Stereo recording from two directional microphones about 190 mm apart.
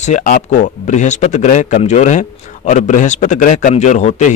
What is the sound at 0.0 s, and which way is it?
A man's voice, 40° left (ahead or behind).